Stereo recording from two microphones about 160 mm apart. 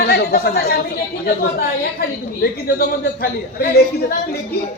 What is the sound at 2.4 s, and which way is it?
A man's voice, 80° left.